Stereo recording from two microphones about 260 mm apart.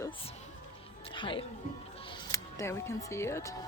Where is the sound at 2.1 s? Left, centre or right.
Centre.